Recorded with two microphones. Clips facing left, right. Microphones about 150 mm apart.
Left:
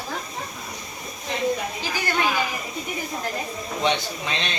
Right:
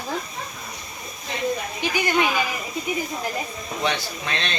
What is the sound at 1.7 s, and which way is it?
Speech, 15° right (ahead or behind).